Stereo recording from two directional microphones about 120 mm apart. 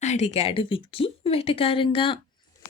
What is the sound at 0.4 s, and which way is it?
Speech, 50° left (ahead or behind).